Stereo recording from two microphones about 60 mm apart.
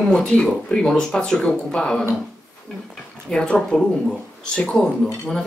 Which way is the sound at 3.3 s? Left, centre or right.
Centre.